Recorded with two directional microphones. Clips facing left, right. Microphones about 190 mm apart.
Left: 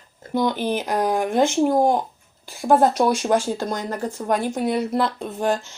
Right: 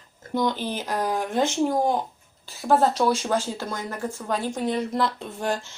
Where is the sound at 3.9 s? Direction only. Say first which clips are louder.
Left 4 dB; 40° left (ahead or behind).